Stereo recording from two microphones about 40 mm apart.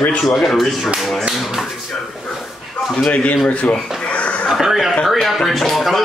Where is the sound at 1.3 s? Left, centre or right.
Centre.